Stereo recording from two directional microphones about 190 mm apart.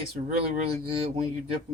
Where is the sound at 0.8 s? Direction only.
30° right (ahead or behind).